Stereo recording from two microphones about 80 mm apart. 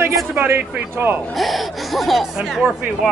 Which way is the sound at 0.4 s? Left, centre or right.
Right.